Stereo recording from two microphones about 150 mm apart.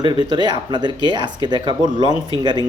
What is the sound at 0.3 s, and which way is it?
Speech, 30° right (ahead or behind).